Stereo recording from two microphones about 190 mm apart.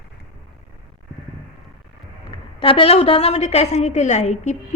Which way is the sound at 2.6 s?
30° left (ahead or behind).